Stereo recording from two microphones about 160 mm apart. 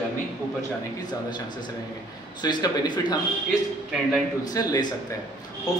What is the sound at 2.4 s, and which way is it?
Speech, 25° left (ahead or behind).